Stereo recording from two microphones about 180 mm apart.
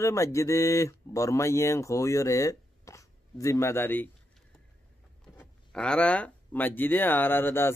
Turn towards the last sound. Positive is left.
turn(degrees=10)  # may be behind; listen again after turning